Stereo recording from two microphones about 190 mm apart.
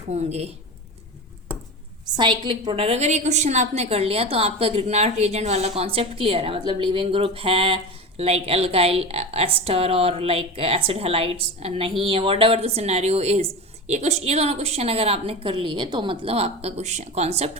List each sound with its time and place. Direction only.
0.1 s a woman's voice: 35° right (ahead or behind)
2.1 s a woman's voice: 25° right (ahead or behind)